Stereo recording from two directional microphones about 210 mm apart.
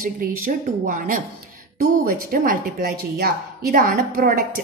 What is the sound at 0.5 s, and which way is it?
Speech, 40° right (ahead or behind).